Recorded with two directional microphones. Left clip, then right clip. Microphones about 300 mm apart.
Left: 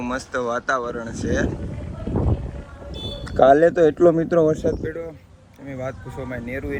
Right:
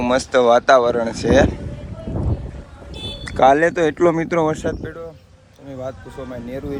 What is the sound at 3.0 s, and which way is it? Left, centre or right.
Speech, centre.